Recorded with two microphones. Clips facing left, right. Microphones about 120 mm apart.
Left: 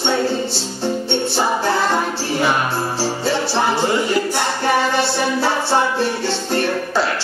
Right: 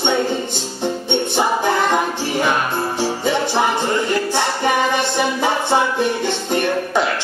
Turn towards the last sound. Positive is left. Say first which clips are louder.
# right 1 dB
turn(degrees=-15)  # may be behind; listen again after turning